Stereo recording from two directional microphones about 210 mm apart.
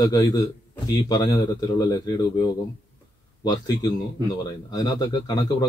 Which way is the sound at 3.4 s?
20° left (ahead or behind).